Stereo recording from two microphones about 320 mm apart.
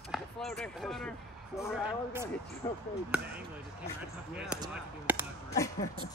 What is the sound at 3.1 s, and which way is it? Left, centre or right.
Speech, centre.